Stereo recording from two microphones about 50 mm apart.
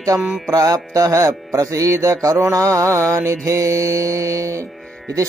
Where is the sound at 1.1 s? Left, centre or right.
Right.